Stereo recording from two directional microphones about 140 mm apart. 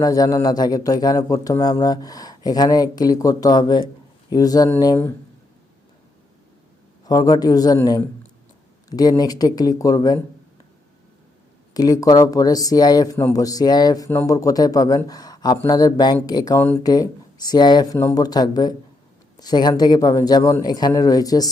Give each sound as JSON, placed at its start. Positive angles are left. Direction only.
{"t": 0.0, "sound": "speech", "side_deg": 25}
{"t": 7.0, "sound": "speech", "side_deg": 25}
{"t": 11.7, "sound": "speech", "side_deg": 25}